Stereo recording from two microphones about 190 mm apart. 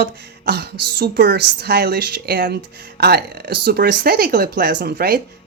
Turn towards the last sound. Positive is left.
turn(degrees=-55)  # may be behind; listen again after turning